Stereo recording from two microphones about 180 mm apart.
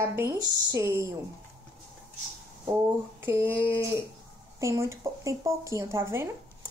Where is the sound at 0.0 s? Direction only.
15° right (ahead or behind).